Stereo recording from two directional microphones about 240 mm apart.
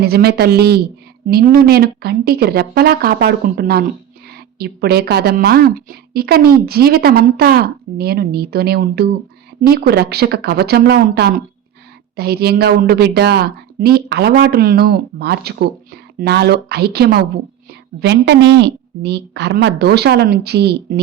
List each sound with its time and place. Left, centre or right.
0.0 s a woman's voice: right